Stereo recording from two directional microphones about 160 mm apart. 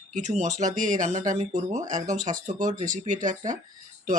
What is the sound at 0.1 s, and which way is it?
Speech, 50° right (ahead or behind).